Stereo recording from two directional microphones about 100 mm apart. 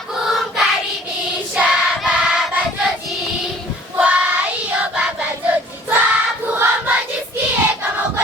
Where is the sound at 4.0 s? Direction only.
10° right (ahead or behind).